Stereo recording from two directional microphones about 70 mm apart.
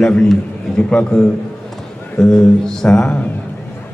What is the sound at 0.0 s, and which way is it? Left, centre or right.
A man's voice, centre.